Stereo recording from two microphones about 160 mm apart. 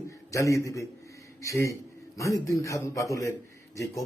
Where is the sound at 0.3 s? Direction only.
20° left (ahead or behind).